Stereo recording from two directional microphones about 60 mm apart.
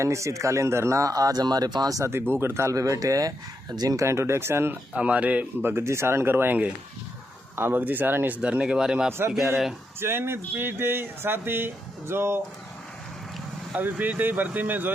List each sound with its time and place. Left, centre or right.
0.0 s speech: right
2.3 s speech: right
2.7 s speech: right
3.8 s speech: right
4.0 s speech: right
4.9 s speech: right
5.6 s speech: right
8.4 s speech: centre
10.0 s speech: right
13.7 s speech: right